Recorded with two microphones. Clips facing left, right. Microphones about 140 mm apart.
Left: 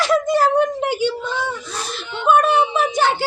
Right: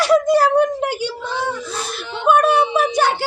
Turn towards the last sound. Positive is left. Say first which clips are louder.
# right 1 dB
turn(degrees=-10)  # may be behind; listen again after turning